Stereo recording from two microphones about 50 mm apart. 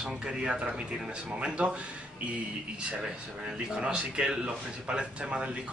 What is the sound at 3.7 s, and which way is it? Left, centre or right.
Speech, centre.